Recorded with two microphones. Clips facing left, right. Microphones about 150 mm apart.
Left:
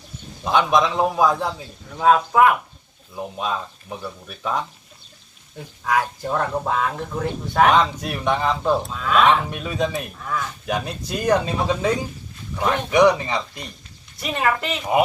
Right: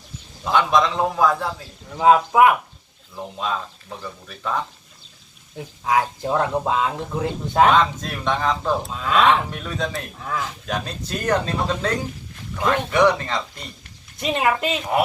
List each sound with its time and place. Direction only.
0.4 s speech: 15° left (ahead or behind)
2.0 s speech: 15° right (ahead or behind)
3.2 s speech: 15° left (ahead or behind)
5.5 s speech: 15° right (ahead or behind)
7.7 s speech: 10° left (ahead or behind)
8.9 s a child's voice: 25° right (ahead or behind)
9.2 s speech: 10° left (ahead or behind)
14.2 s a child's voice: 20° right (ahead or behind)